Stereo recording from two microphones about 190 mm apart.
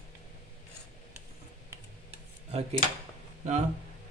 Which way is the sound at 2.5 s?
35° right (ahead or behind).